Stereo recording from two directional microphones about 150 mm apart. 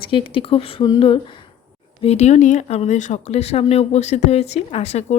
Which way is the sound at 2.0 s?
45° left (ahead or behind).